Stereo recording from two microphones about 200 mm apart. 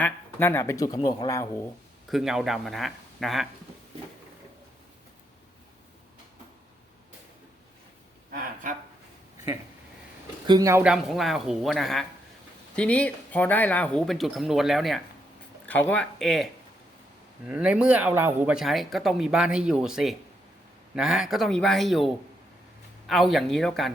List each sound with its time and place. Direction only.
0.0 s speech: 10° left (ahead or behind)
2.0 s speech: centre (ahead or behind)
10.4 s speech: 20° right (ahead or behind)
10.9 s speech: centre (ahead or behind)